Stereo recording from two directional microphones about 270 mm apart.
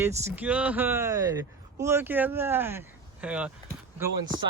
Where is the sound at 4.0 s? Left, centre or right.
Centre.